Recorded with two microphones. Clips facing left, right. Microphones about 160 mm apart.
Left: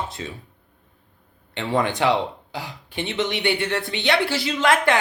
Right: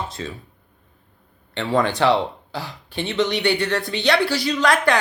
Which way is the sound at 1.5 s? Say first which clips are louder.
Right 2 dB; 15° left (ahead or behind).